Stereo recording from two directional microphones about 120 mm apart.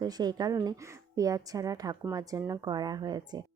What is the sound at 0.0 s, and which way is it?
A woman's voice, 35° right (ahead or behind).